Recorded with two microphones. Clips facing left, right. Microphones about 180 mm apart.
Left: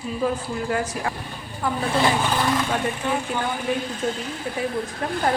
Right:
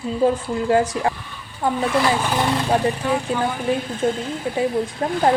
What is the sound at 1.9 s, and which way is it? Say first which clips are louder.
Speech: even; 25° left (ahead or behind).